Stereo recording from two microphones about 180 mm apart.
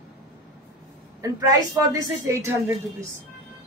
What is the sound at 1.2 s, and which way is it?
A woman's voice, 20° right (ahead or behind).